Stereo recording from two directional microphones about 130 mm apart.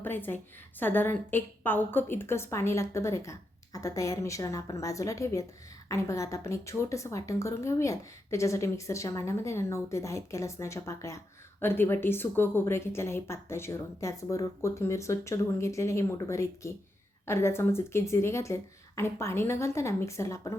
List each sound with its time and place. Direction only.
0.0 s a woman's voice: 15° left (ahead or behind)